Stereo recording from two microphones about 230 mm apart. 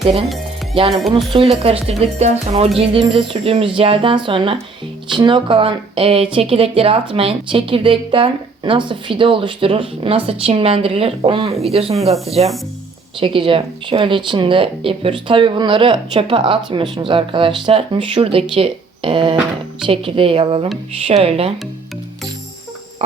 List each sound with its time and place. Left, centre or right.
0.3 s music: centre
1.1 s speech: right
23.0 s a sound: right